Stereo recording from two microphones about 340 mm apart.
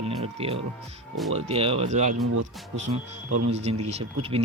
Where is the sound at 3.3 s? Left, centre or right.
Right.